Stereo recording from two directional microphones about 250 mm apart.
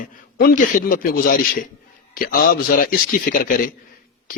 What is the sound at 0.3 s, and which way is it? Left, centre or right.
Speech, left.